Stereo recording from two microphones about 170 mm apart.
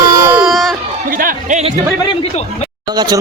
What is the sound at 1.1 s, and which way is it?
Music, 50° right (ahead or behind).